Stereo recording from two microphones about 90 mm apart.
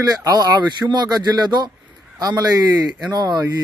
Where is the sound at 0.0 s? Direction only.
45° right (ahead or behind).